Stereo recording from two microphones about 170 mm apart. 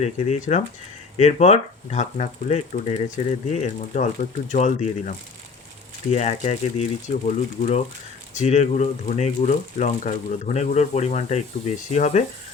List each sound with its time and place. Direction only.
0.0 s speech: 45° left (ahead or behind)